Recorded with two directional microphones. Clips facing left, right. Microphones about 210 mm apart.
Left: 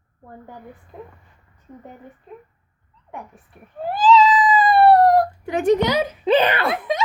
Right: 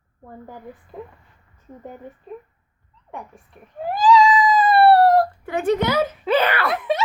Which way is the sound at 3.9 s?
15° right (ahead or behind).